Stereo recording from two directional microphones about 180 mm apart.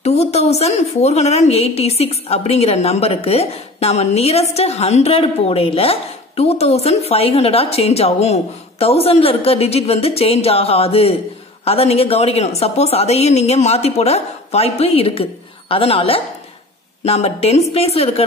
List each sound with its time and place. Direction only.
0.0 s a woman's voice: 35° left (ahead or behind)